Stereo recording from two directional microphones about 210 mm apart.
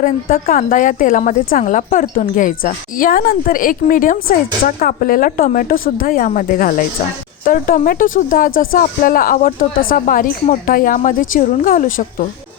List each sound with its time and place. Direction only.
0.0 s a woman's voice: 40° left (ahead or behind)